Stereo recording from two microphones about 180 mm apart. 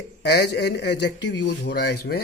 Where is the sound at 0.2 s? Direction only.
70° left (ahead or behind).